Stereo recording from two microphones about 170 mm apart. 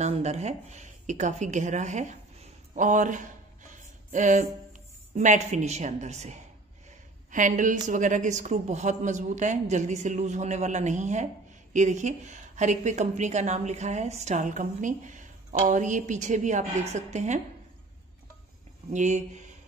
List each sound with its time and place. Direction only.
0.0 s a woman's voice: 40° right (ahead or behind)
18.9 s a woman's voice: 45° right (ahead or behind)